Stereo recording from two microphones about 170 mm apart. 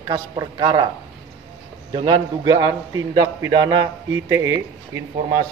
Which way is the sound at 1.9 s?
30° right (ahead or behind).